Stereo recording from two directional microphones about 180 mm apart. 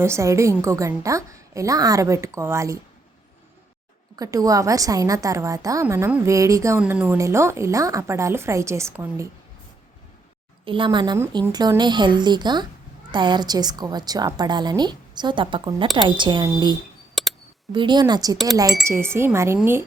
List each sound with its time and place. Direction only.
0.0 s a woman's voice: 15° right (ahead or behind)
4.2 s a woman's voice: 20° right (ahead or behind)
10.7 s a woman's voice: 25° right (ahead or behind)
17.2 s a sound: centre (ahead or behind)
17.7 s a woman's voice: 25° right (ahead or behind)